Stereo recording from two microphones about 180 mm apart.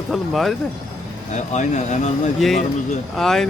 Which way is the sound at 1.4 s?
40° left (ahead or behind).